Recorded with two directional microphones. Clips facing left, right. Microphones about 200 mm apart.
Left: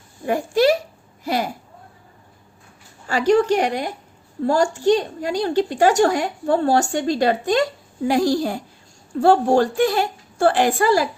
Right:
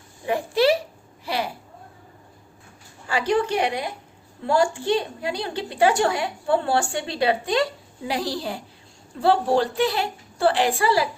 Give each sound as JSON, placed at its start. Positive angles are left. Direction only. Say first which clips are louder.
{"t": 0.3, "sound": "a woman's voice", "louder": "left 3 dB", "side_deg": 45}
{"t": 3.1, "sound": "a woman's voice", "louder": "left 6 dB", "side_deg": 45}